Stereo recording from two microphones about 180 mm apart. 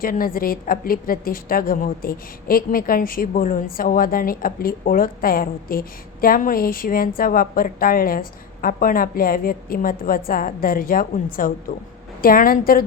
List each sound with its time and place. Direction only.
0.0 s a woman's voice: 50° left (ahead or behind)